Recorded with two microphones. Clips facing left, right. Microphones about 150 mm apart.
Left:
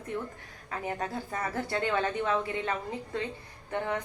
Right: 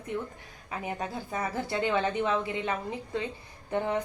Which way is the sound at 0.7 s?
15° right (ahead or behind).